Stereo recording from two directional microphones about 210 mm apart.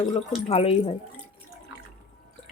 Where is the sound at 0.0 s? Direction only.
20° left (ahead or behind).